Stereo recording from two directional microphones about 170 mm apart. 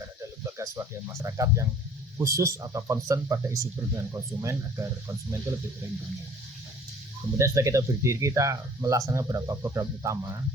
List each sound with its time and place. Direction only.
0.4 s speech: 20° right (ahead or behind)
7.3 s speech: 15° right (ahead or behind)